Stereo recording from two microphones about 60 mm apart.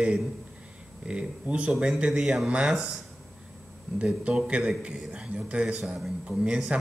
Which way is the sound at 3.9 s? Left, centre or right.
Centre.